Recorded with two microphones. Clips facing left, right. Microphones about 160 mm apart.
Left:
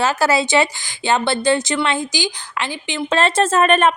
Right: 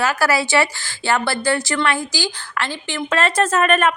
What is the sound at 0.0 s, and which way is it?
A woman's voice, 25° left (ahead or behind).